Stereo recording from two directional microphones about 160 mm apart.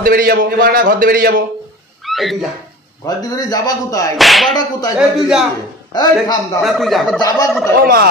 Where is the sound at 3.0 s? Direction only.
20° left (ahead or behind).